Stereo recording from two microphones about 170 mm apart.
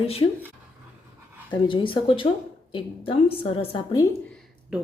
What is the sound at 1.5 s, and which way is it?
A woman's voice, 30° left (ahead or behind).